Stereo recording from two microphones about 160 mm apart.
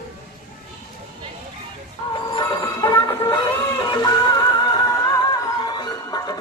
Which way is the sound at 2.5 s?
20° left (ahead or behind).